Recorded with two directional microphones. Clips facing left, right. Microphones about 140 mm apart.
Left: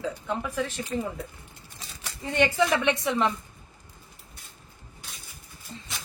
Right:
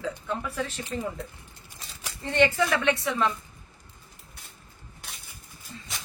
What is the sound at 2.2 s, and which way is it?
A woman's voice, 10° left (ahead or behind).